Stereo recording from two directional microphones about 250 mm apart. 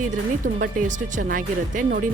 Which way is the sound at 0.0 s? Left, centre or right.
Right.